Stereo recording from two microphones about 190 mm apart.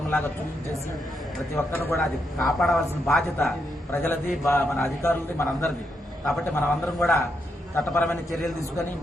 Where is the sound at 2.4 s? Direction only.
Centre (ahead or behind).